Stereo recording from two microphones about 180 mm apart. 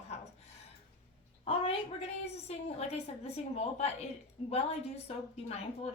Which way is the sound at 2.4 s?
35° left (ahead or behind).